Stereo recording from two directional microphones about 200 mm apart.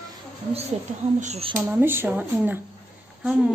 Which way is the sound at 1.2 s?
30° right (ahead or behind).